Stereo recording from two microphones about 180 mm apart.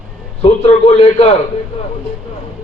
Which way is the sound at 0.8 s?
35° left (ahead or behind).